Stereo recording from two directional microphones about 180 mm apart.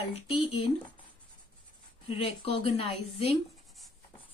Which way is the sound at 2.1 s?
30° left (ahead or behind).